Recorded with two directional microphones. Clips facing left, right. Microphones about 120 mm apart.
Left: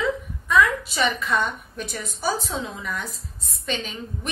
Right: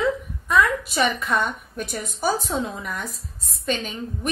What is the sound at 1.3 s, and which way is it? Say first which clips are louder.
Speech: right 1 dB; 10° right (ahead or behind).